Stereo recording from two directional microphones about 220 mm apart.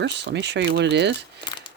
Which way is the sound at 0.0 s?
50° right (ahead or behind).